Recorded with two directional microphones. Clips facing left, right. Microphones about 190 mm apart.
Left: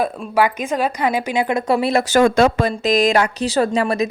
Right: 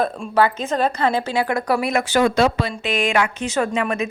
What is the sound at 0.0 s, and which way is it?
A woman's voice, 10° left (ahead or behind).